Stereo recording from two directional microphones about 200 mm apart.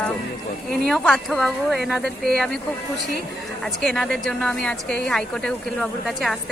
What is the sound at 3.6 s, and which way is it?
A woman's voice, 5° left (ahead or behind).